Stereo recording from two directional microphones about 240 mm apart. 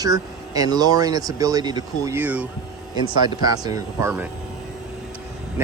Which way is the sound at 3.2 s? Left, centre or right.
Centre.